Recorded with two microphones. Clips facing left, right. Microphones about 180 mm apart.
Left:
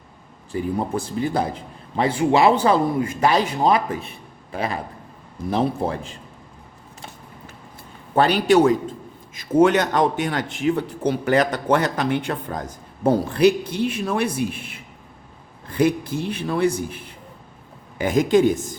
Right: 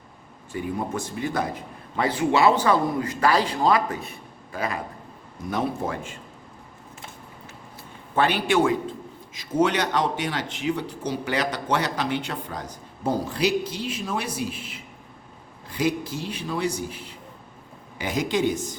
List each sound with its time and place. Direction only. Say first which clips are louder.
0.5 s a man's voice: left 4 dB; 30° left (ahead or behind)
8.1 s speech: left 5 dB; 40° left (ahead or behind)
9.3 s a man's voice: left 6 dB; 55° left (ahead or behind)